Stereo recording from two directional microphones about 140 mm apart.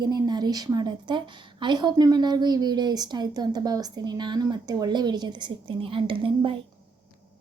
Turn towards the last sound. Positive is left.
turn(degrees=-40)  # may be behind; listen again after turning